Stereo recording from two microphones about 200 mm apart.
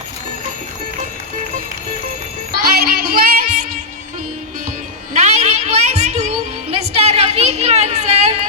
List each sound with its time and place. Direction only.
2.5 s music: 50° right (ahead or behind)
5.2 s music: 35° right (ahead or behind)